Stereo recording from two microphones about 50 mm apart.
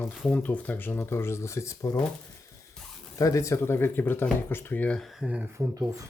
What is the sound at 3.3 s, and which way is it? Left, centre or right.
Speech, left.